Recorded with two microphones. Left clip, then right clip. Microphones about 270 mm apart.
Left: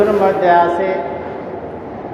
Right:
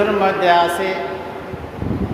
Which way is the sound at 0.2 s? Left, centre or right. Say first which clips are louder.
Left 2 dB; right.